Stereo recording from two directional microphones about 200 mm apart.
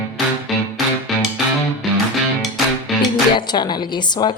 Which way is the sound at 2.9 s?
Centre (ahead or behind).